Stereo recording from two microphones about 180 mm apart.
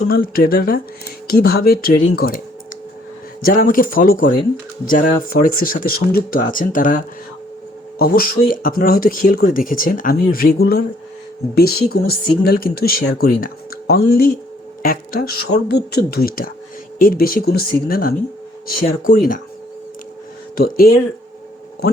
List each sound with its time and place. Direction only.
0.1 s speech: 55° left (ahead or behind)
3.4 s speech: 50° left (ahead or behind)
20.6 s speech: 55° left (ahead or behind)